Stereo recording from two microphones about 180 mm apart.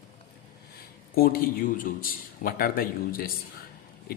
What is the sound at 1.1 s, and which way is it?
A man's voice, 55° left (ahead or behind).